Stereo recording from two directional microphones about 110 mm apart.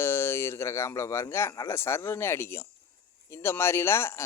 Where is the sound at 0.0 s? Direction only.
25° left (ahead or behind).